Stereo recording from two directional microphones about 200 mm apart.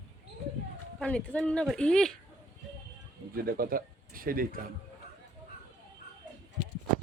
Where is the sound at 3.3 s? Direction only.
45° right (ahead or behind).